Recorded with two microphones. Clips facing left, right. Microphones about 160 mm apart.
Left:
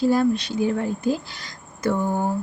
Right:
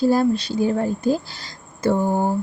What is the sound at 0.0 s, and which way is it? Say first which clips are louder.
Speech: right 2 dB; 35° right (ahead or behind).